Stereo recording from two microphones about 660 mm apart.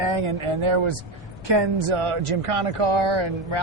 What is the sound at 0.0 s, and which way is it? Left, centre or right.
A man's voice, right.